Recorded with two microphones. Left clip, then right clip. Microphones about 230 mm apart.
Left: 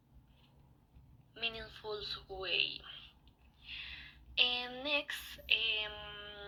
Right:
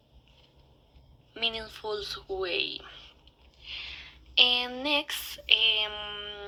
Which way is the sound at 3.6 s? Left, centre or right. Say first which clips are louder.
Right 7 dB; right.